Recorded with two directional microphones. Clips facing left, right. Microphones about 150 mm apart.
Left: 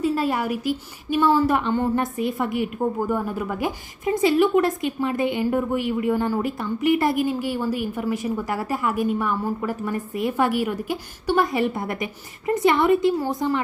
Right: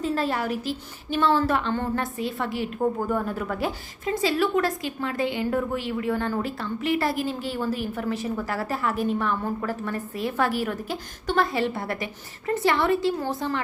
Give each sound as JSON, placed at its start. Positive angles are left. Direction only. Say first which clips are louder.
{"t": 0.0, "sound": "a woman's voice", "louder": "left 3 dB", "side_deg": 10}